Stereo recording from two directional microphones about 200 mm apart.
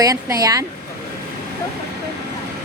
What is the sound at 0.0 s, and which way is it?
Speech, 15° right (ahead or behind).